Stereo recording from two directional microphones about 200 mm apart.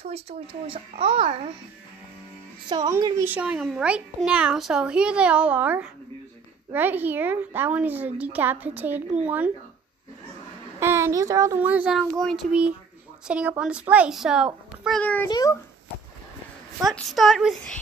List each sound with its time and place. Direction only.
0.0 s a child's voice: 30° right (ahead or behind)
2.7 s a child's voice: 20° right (ahead or behind)
10.8 s a woman's voice: 10° right (ahead or behind)
15.0 s a child's voice: 10° left (ahead or behind)
15.2 s a child's voice: 20° left (ahead or behind)
16.8 s a child's voice: centre (ahead or behind)